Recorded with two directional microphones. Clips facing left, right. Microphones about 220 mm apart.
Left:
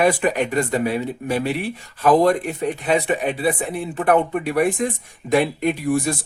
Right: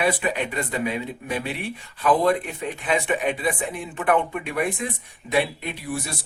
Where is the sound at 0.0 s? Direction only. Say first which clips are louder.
Left 5 dB; 45° left (ahead or behind).